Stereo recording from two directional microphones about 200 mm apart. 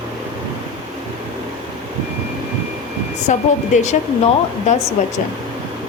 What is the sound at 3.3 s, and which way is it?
Speech, 35° left (ahead or behind).